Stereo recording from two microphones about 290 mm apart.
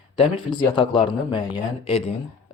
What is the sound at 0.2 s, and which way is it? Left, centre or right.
Speech, centre.